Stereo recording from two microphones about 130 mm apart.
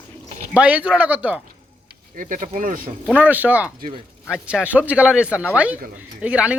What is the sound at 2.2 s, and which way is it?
Speech, 90° right.